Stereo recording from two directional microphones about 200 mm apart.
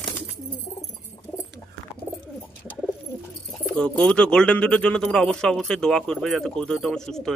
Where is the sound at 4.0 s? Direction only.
5° left (ahead or behind).